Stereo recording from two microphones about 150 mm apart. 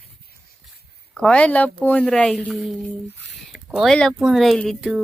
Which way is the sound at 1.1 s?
5° left (ahead or behind).